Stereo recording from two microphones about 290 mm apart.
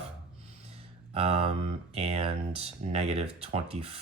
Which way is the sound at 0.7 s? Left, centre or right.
Centre.